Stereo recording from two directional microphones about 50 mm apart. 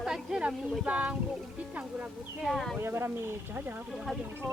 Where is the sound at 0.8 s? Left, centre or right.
Centre.